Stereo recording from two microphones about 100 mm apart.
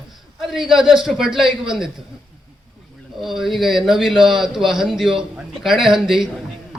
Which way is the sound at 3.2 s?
Centre (ahead or behind).